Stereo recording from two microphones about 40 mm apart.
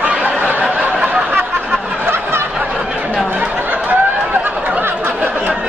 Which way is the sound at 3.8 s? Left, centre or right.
Right.